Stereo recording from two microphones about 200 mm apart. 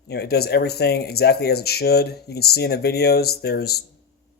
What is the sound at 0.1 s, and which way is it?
Speech, 55° left (ahead or behind).